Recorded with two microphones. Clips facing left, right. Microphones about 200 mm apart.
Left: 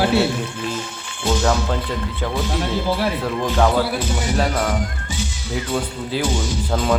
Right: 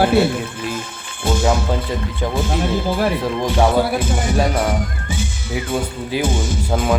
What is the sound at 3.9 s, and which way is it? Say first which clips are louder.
Speech: right 3 dB; 50° right (ahead or behind).